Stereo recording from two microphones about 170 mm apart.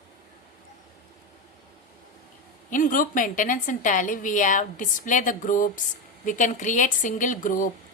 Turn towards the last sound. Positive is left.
turn(degrees=50)  # may be behind; listen again after turning